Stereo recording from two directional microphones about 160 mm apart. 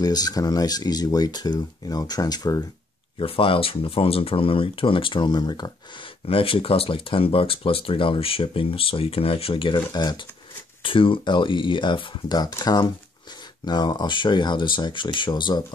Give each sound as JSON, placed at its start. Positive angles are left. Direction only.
{"t": 0.0, "sound": "speech", "side_deg": 25}